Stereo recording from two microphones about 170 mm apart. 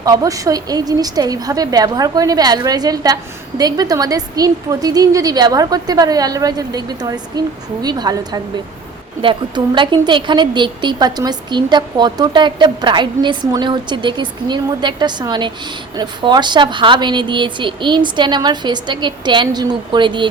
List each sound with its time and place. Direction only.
0.0 s a woman's voice: 20° right (ahead or behind)